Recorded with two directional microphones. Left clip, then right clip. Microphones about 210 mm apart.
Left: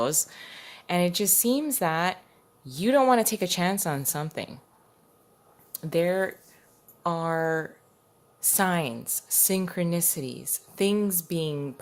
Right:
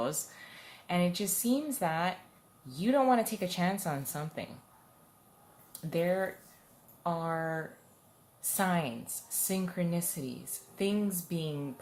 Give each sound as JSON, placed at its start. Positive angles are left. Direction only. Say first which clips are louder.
{"t": 0.0, "sound": "speech", "louder": "left 8 dB", "side_deg": 50}
{"t": 5.7, "sound": "speech", "louder": "left 6 dB", "side_deg": 50}